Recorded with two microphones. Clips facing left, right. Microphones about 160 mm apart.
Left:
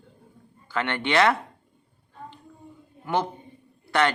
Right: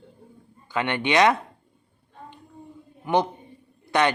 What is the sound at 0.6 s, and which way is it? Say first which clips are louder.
Speech: right 2 dB; 15° right (ahead or behind).